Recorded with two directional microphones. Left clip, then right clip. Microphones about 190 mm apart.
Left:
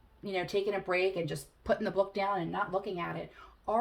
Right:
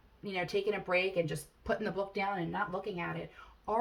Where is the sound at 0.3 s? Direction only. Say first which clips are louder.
Left 1 dB; 35° left (ahead or behind).